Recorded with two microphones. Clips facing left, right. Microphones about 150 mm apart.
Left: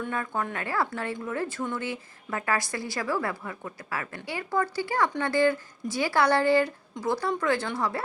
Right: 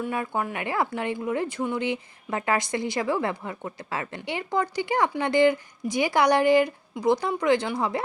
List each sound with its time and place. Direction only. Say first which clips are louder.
0.0 s a woman's voice: right 3 dB; 15° right (ahead or behind)